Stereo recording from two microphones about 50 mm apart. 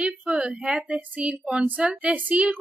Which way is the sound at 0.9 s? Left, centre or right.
Right.